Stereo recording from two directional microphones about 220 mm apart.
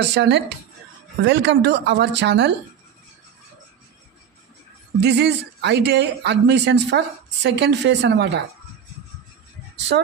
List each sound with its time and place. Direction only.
0.0 s speech: 50° right (ahead or behind)
5.0 s speech: 50° right (ahead or behind)